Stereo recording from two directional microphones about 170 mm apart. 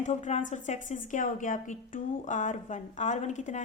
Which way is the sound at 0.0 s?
45° left (ahead or behind).